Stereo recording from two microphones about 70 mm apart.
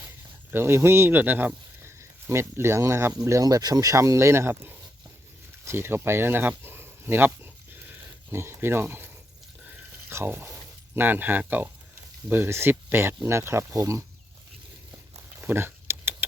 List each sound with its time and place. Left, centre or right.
0.5 s speech: right
2.0 s speech: right
3.4 s speech: right
9.6 s a sound: right
11.0 s speech: right
15.4 s a sound: right